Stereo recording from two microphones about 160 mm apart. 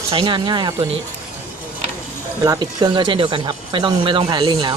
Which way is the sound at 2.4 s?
25° right (ahead or behind).